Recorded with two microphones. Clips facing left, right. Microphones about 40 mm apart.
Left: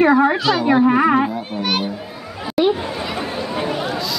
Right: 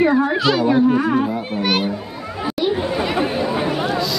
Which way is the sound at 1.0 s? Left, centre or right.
Left.